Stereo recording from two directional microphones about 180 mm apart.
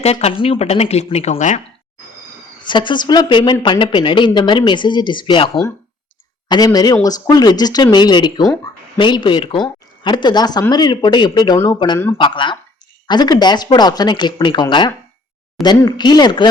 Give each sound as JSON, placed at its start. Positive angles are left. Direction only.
{"t": 0.0, "sound": "speech", "side_deg": 35}
{"t": 2.6, "sound": "speech", "side_deg": 25}
{"t": 6.7, "sound": "speech", "side_deg": 20}